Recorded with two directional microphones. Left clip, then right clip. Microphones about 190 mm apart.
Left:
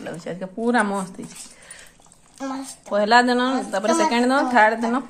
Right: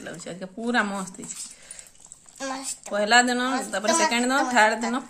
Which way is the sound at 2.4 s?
45° right (ahead or behind).